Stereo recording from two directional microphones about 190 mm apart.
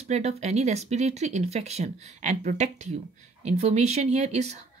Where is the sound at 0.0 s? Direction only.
35° right (ahead or behind).